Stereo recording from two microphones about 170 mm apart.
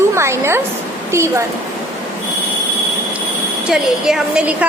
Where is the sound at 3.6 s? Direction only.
5° right (ahead or behind).